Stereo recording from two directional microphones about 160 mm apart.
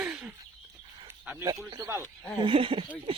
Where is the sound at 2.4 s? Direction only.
35° right (ahead or behind).